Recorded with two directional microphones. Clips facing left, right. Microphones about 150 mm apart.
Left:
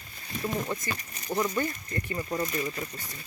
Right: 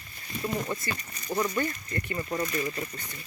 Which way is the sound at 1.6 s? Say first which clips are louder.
Even; 15° left (ahead or behind).